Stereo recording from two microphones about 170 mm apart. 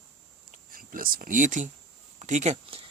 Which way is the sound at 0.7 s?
55° right (ahead or behind).